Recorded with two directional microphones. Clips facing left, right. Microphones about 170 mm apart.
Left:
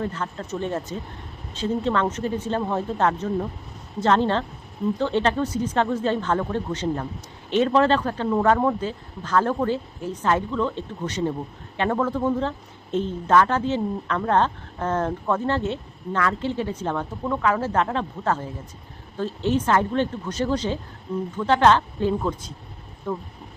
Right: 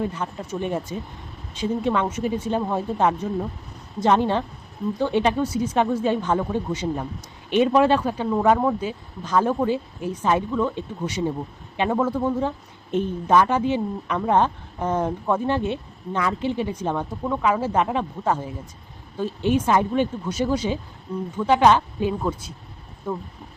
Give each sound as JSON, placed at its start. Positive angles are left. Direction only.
{"t": 0.0, "sound": "a woman's voice", "side_deg": -15}